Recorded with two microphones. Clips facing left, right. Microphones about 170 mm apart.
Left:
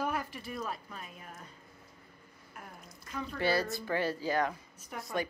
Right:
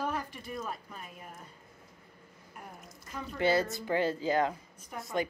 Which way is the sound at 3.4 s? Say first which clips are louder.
Right 3 dB; 20° right (ahead or behind).